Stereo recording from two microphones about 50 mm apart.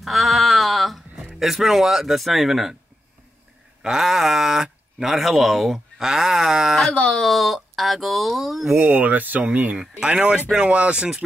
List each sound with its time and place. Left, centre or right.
0.0 s music: centre
1.4 s speech: centre
3.8 s speech: centre
6.0 s a sound: centre
6.9 s speech: left
7.2 s speech: centre
8.7 s speech: right
9.8 s a sound: centre
10.5 s speech: right